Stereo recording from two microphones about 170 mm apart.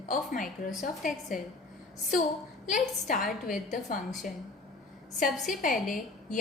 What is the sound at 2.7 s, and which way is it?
Speech, 45° left (ahead or behind).